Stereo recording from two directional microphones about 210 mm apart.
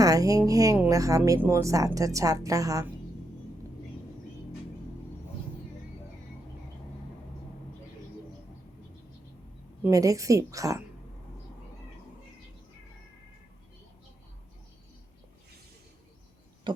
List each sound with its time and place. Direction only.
0.0 s a woman's voice: 15° right (ahead or behind)
9.8 s a woman's voice: 15° right (ahead or behind)
16.7 s a sound: 25° right (ahead or behind)